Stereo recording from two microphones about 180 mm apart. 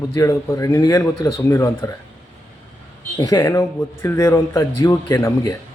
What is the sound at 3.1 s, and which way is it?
A man's voice, 20° left (ahead or behind).